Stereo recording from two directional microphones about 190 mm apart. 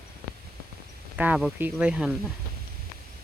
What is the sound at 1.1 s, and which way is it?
Speech, 10° right (ahead or behind).